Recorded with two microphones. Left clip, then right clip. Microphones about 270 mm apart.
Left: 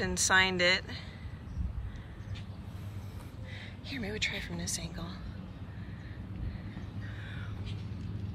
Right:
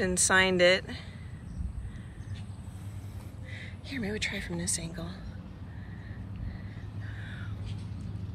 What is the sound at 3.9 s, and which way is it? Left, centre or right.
Speech, centre.